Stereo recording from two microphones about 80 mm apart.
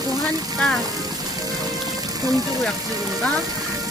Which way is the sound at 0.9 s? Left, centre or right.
Right.